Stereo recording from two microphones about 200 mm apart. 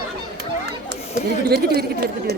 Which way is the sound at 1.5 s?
55° right (ahead or behind).